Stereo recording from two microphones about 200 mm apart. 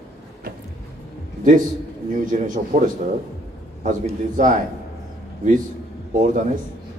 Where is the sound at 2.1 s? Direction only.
40° right (ahead or behind).